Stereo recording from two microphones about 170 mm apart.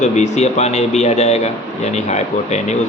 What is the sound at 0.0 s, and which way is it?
A man's voice, 45° left (ahead or behind).